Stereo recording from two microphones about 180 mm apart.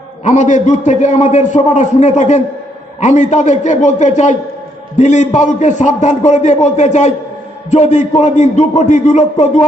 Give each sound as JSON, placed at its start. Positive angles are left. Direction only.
{"t": 0.3, "sound": "a man's voice", "side_deg": 40}